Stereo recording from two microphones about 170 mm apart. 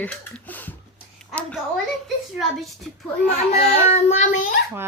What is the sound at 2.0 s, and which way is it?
Speech, centre (ahead or behind).